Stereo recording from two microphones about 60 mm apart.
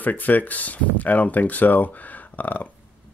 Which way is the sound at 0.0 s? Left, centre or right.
Left.